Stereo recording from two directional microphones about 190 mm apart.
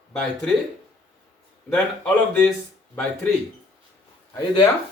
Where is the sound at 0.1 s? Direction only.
5° left (ahead or behind).